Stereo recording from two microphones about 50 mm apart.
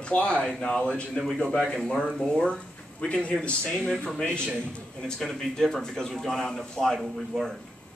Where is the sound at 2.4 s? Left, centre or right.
Centre.